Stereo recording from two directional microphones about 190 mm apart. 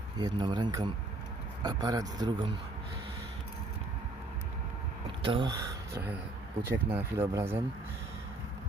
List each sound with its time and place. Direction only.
0.2 s speech: 20° right (ahead or behind)
5.2 s speech: 25° right (ahead or behind)